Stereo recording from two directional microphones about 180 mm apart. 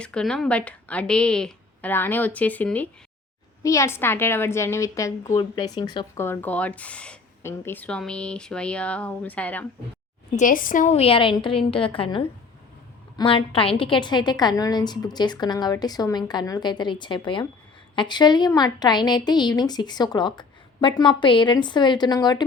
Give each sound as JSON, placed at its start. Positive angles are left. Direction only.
{"t": 0.0, "sound": "a woman's voice", "side_deg": 5}
{"t": 6.1, "sound": "speech", "side_deg": 15}
{"t": 10.3, "sound": "a woman's voice", "side_deg": 50}